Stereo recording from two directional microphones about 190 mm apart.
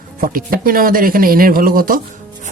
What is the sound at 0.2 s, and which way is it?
Speech, 50° right (ahead or behind).